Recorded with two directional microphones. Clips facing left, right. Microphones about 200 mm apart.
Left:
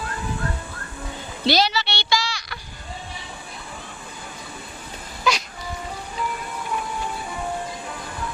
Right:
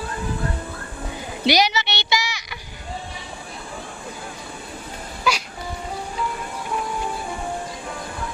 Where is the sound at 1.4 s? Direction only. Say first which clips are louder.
Right 1 dB; 15° right (ahead or behind).